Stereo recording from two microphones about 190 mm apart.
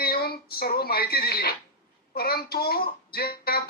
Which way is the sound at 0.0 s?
55° left (ahead or behind).